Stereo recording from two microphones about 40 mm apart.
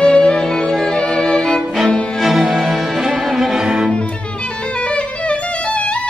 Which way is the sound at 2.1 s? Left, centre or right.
Centre.